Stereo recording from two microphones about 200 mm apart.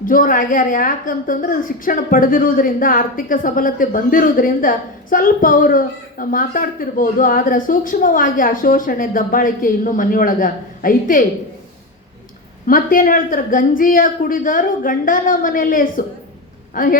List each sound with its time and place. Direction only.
0.0 s a woman's voice: 45° left (ahead or behind)
12.6 s a woman's voice: 45° left (ahead or behind)